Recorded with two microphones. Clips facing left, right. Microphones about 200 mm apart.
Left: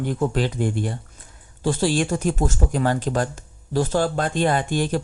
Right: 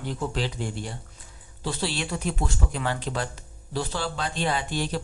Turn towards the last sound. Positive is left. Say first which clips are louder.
# left 6 dB
turn(degrees=50)  # may be behind; listen again after turning